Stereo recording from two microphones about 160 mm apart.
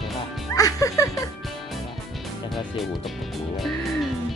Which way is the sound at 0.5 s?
20° left (ahead or behind).